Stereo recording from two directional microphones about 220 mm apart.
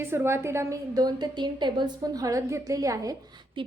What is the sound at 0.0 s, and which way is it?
A woman's voice, 10° right (ahead or behind).